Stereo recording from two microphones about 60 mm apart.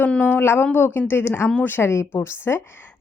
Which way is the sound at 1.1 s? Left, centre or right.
Left.